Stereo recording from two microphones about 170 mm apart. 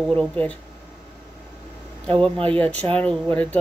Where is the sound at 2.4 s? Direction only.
10° left (ahead or behind).